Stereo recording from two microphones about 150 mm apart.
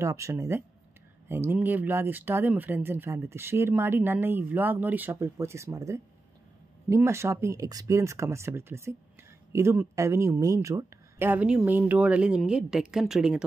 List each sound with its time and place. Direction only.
0.0 s speech: 20° right (ahead or behind)